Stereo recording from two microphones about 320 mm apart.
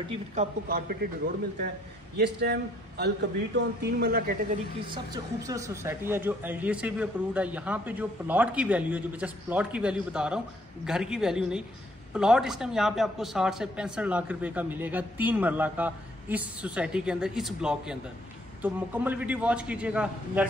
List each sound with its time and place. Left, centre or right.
0.1 s a man's voice: right
4.9 s a woman's voice: centre